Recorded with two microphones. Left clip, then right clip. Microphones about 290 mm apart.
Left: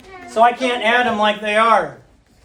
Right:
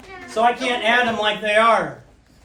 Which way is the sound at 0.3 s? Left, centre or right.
Left.